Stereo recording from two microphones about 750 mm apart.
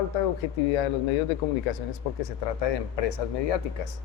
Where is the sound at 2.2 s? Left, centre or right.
Left.